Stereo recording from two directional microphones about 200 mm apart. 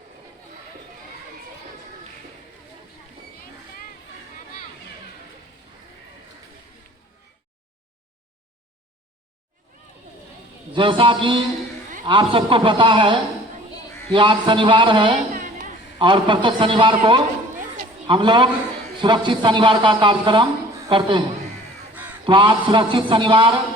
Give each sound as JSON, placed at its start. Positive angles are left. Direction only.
{"t": 10.7, "sound": "speech", "side_deg": -25}
{"t": 22.3, "sound": "speech", "side_deg": -25}